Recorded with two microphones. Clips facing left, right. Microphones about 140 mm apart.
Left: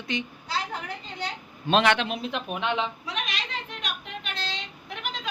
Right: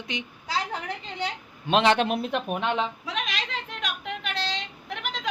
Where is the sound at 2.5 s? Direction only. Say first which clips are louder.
Left 1 dB; 40° right (ahead or behind).